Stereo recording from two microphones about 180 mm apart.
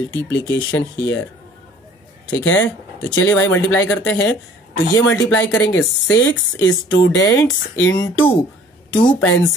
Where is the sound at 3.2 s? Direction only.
15° left (ahead or behind).